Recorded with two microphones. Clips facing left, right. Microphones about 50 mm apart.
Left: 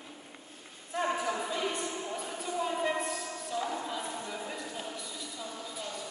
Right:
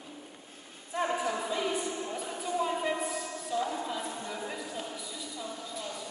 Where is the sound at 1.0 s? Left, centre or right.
Centre.